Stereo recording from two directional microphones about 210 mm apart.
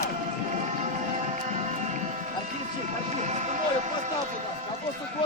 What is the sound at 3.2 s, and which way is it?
Vehicle, 35° right (ahead or behind).